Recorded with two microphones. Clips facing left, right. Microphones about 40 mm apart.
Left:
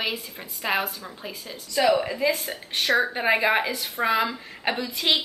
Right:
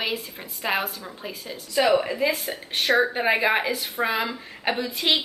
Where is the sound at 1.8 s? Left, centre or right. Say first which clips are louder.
Right 1 dB; right.